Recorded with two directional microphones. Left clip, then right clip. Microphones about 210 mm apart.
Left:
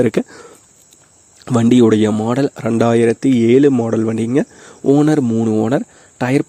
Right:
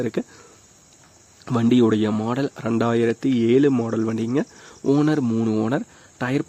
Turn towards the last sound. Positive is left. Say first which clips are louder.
# left 8 dB
turn(degrees=30)  # may be behind; listen again after turning